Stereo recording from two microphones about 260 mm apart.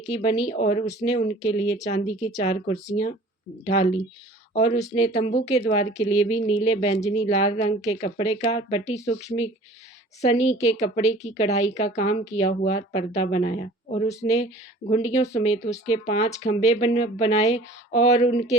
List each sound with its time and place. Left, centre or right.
0.1 s a woman's voice: left
2.7 s speech: centre
4.5 s a woman's voice: left